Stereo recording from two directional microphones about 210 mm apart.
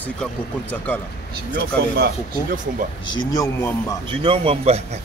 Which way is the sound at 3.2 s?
15° left (ahead or behind).